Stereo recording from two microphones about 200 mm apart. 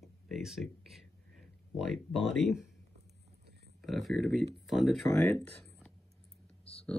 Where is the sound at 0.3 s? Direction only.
Centre (ahead or behind).